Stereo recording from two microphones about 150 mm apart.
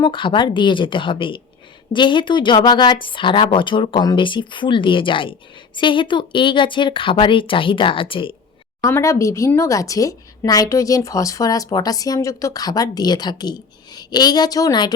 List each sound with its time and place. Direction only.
0.0 s a woman's voice: 35° left (ahead or behind)
8.8 s a woman's voice: 20° left (ahead or behind)